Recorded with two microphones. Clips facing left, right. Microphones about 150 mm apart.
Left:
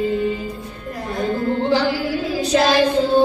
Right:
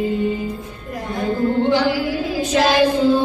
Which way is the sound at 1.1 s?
35° left (ahead or behind).